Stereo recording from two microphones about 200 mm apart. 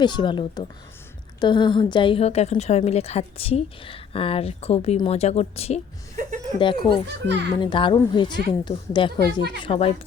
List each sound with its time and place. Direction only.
0.0 s a woman's voice: 25° left (ahead or behind)
6.2 s speech: 40° right (ahead or behind)
6.6 s a woman's voice: 25° left (ahead or behind)